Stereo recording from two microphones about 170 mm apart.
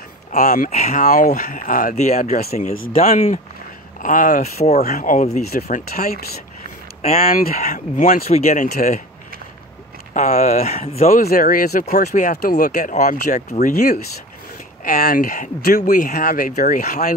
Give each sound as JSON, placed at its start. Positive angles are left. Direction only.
{"t": 0.3, "sound": "speech", "side_deg": 45}
{"t": 4.9, "sound": "speech", "side_deg": 50}
{"t": 5.5, "sound": "speech", "side_deg": 65}
{"t": 7.2, "sound": "speech", "side_deg": 50}
{"t": 10.1, "sound": "speech", "side_deg": 45}
{"t": 11.1, "sound": "speech", "side_deg": 60}
{"t": 14.9, "sound": "speech", "side_deg": 60}